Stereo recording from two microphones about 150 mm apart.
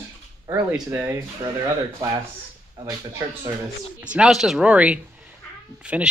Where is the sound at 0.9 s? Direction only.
15° right (ahead or behind).